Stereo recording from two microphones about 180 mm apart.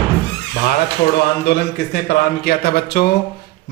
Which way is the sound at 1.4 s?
65° left (ahead or behind).